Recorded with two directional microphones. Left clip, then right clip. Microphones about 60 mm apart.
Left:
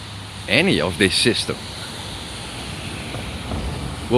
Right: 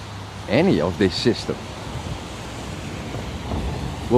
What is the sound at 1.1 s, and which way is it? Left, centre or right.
Speech, right.